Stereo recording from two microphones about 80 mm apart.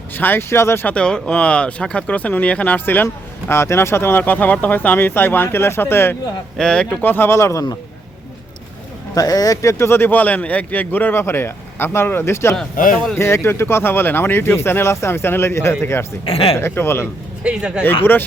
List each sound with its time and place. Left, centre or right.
0.1 s speech: left
0.9 s speech: centre; by 6.1 s left
6.6 s speech: centre
7.0 s speech: left
9.1 s speech: left
17.4 s speech: centre